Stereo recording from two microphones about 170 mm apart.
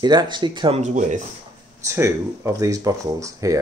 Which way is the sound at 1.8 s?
15° right (ahead or behind).